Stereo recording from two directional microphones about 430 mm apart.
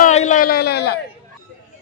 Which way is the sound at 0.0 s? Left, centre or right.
Centre.